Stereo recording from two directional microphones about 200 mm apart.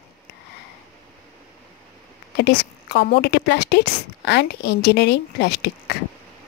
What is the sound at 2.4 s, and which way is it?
A woman's voice, 55° left (ahead or behind).